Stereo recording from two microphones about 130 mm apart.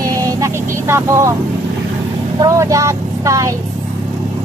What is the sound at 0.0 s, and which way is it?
Vehicle, 25° right (ahead or behind).